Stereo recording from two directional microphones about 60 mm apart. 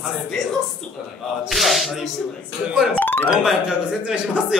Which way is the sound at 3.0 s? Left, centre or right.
Left.